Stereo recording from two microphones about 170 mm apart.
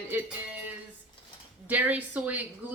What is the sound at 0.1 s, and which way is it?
Speech, 10° right (ahead or behind).